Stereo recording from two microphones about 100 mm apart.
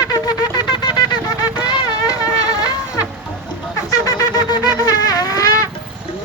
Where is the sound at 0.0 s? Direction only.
40° left (ahead or behind).